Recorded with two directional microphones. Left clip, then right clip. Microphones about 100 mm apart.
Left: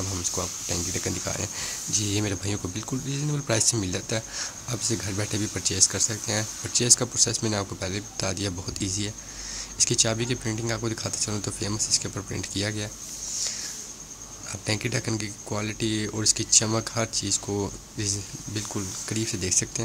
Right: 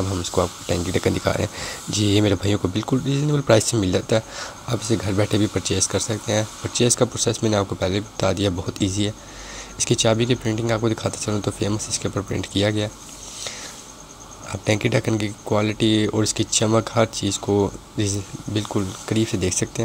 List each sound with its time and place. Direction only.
0.2 s speech: 35° right (ahead or behind)
14.5 s speech: 30° right (ahead or behind)